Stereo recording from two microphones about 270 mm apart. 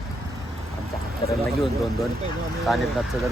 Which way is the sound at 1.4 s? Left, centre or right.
Centre.